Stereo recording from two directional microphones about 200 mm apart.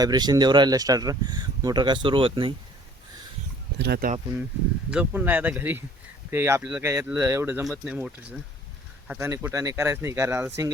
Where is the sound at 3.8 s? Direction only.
50° right (ahead or behind).